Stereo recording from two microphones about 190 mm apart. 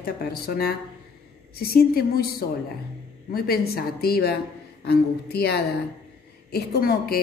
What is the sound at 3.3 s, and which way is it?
A woman's voice, 55° left (ahead or behind).